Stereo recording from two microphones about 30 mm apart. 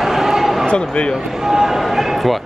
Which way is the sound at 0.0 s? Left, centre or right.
Centre.